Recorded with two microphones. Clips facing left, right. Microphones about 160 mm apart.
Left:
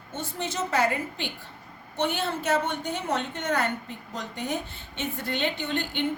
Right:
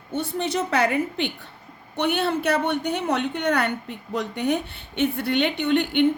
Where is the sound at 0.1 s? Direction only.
65° right (ahead or behind).